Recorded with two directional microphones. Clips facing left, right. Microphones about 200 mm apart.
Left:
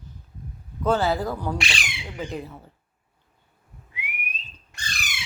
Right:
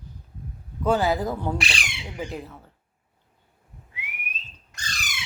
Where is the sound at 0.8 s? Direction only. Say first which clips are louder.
Even; 15° right (ahead or behind).